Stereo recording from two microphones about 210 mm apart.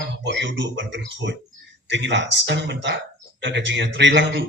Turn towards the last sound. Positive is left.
turn(degrees=-60)  # may be behind; listen again after turning